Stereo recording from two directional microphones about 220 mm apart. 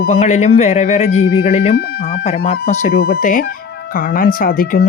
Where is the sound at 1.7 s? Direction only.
45° left (ahead or behind).